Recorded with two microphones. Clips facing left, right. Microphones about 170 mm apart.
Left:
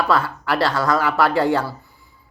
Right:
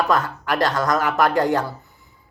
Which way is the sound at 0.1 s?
20° right (ahead or behind).